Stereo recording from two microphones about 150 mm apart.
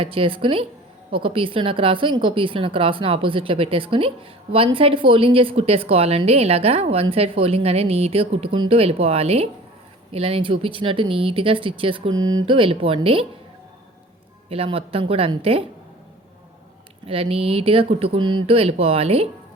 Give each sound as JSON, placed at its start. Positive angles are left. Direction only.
{"t": 0.0, "sound": "a woman's voice", "side_deg": -40}
{"t": 14.5, "sound": "a woman's voice", "side_deg": -40}
{"t": 17.1, "sound": "a woman's voice", "side_deg": -40}